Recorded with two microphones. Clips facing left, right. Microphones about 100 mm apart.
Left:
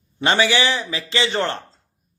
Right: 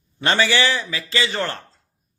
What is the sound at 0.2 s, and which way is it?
A man's voice, 15° left (ahead or behind).